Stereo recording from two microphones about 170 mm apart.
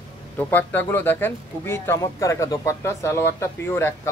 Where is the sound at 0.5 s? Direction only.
10° left (ahead or behind).